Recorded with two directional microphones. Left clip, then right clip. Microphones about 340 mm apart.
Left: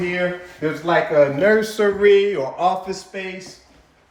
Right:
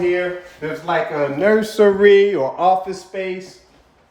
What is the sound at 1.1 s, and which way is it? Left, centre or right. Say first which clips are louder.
Speech: left 2 dB; centre.